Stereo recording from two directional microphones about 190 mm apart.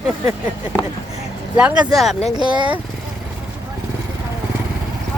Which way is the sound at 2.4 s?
25° right (ahead or behind).